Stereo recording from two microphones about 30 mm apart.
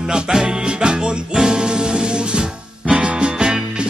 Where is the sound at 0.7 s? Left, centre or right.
Right.